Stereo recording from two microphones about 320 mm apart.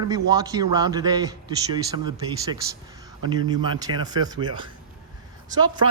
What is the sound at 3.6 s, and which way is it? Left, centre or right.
Speech, centre.